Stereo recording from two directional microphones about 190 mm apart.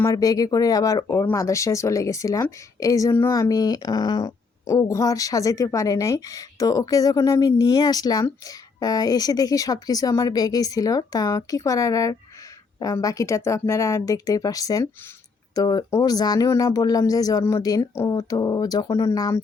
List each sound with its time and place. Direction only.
0.0 s speech: 20° left (ahead or behind)